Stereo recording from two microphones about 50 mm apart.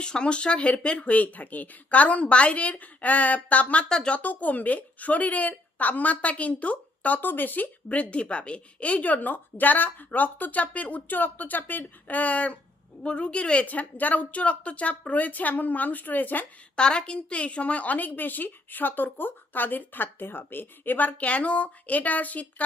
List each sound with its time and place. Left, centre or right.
0.0 s speech: centre
3.8 s speech: centre
4.2 s speech: left
16.7 s speech: centre